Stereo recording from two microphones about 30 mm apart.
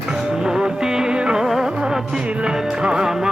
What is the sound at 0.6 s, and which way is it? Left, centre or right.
Music, right.